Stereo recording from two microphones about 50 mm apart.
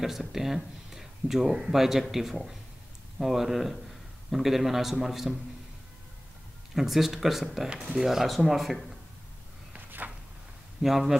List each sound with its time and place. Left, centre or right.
0.0 s a man's voice: centre
6.7 s speech: centre
7.7 s speech: centre
8.0 s speech: centre
9.8 s a sound: right
10.8 s speech: centre